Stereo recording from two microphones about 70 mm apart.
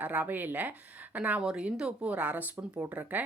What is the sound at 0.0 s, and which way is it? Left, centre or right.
A woman's voice, right.